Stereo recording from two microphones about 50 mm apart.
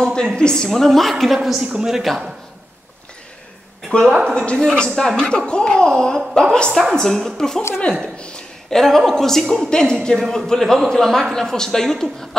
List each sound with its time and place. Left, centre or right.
0.0 s a woman's voice: centre
1.6 s a man's voice: centre
4.4 s speech: centre
6.7 s speech: centre
8.0 s a sound: centre
8.7 s speech: centre
10.6 s a woman's voice: centre